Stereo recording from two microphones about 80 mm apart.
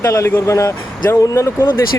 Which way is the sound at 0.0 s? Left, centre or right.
Left.